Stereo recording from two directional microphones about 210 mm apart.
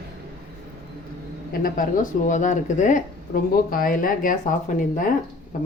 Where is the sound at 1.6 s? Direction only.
40° left (ahead or behind).